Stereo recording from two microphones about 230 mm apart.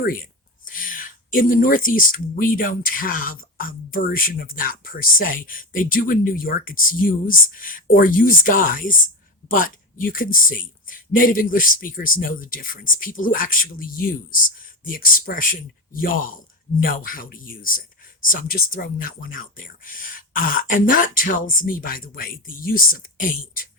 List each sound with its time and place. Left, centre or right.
0.0 s speech: left